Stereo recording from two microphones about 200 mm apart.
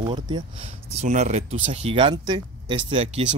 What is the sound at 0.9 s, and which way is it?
Speech, 35° right (ahead or behind).